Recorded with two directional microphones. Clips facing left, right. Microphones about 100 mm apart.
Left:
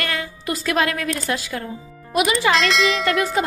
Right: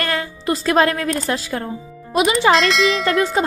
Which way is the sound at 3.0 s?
30° right (ahead or behind).